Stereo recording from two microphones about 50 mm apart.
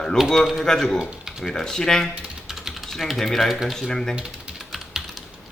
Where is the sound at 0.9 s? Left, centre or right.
Centre.